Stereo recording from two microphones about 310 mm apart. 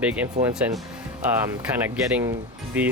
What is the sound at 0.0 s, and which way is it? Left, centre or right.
Speech, centre.